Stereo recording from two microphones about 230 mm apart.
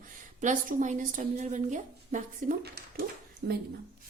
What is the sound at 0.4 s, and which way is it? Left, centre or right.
A woman's voice, right.